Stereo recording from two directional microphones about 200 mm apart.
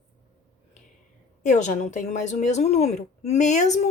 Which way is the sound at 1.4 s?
35° left (ahead or behind).